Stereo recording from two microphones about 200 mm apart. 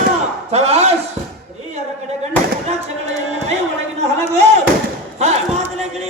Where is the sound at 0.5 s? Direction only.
30° right (ahead or behind).